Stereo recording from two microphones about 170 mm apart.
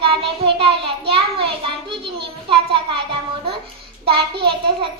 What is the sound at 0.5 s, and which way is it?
A child's voice, 35° right (ahead or behind).